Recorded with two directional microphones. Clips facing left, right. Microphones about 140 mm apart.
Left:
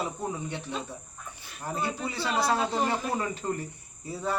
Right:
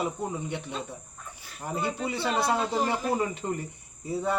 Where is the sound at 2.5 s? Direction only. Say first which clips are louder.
Even; 5° right (ahead or behind).